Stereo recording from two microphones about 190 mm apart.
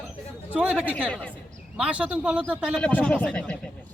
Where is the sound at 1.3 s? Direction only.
5° right (ahead or behind).